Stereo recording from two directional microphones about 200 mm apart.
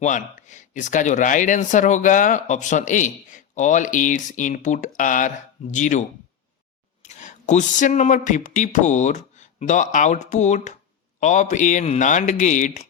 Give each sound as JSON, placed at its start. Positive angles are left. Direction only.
{"t": 0.0, "sound": "speech", "side_deg": 40}